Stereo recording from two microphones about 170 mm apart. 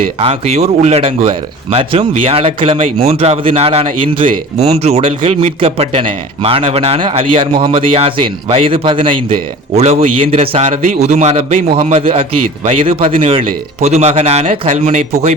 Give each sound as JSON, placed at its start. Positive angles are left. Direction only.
{"t": 0.0, "sound": "speech", "side_deg": -35}